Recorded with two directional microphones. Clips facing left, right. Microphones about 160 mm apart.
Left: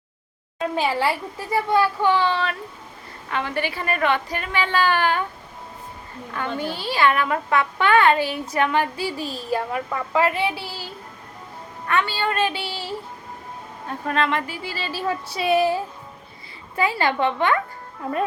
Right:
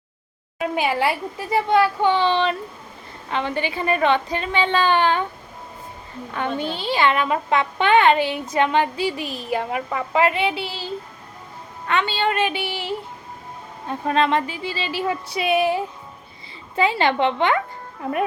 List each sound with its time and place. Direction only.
0.6 s speech: 15° right (ahead or behind)
6.3 s a woman's voice: 20° right (ahead or behind)
14.1 s speech: 20° right (ahead or behind)